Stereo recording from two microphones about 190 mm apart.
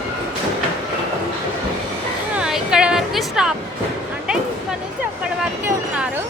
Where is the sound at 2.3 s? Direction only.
5° right (ahead or behind).